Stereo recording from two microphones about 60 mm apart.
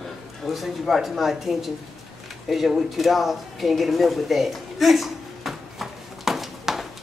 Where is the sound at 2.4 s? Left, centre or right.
Centre.